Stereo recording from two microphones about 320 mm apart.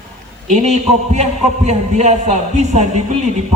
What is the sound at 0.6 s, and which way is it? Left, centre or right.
A man's voice, right.